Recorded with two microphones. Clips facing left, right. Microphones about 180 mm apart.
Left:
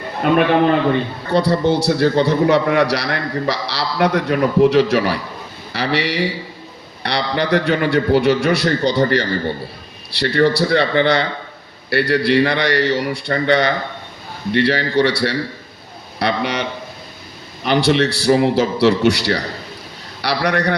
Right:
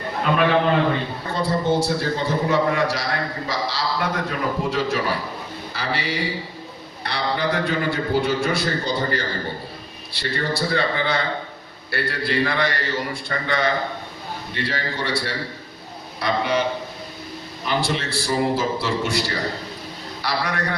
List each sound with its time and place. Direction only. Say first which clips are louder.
0.2 s a man's voice: left 8 dB; 60° left (ahead or behind)
1.3 s a man's voice: left 6 dB; 70° left (ahead or behind)
17.7 s a man's voice: left 9 dB; 70° left (ahead or behind)